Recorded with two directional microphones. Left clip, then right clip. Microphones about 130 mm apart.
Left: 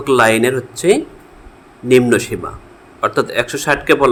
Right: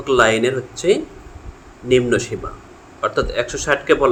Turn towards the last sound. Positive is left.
turn(degrees=60)  # may be behind; listen again after turning